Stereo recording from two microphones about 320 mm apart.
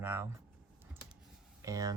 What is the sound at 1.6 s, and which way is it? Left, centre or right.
Speech, centre.